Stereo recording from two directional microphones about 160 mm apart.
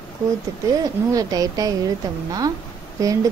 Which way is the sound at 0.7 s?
20° right (ahead or behind).